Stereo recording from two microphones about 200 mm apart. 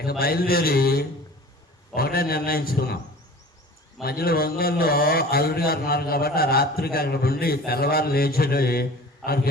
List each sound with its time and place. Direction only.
0.0 s a man's voice: 50° left (ahead or behind)
4.0 s a man's voice: 50° left (ahead or behind)